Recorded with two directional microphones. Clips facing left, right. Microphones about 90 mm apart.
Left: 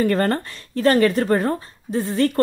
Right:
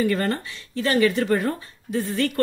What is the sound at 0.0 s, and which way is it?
Speech, 45° left (ahead or behind).